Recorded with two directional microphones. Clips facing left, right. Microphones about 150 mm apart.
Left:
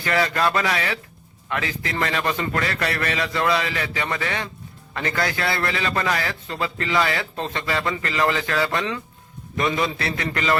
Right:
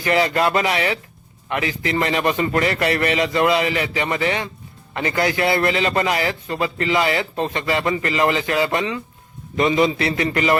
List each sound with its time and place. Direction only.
0.0 s a man's voice: 20° right (ahead or behind)